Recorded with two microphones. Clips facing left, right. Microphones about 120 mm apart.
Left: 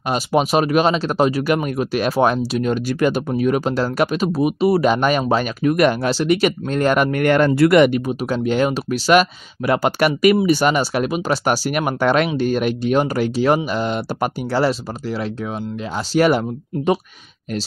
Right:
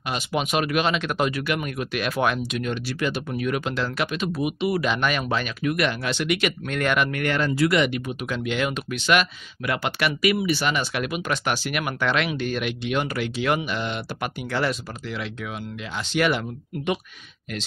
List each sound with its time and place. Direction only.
0.1 s speech: 35° left (ahead or behind)
8.1 s speech: 35° left (ahead or behind)